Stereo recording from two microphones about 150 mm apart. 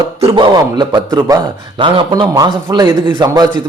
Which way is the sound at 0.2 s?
30° right (ahead or behind).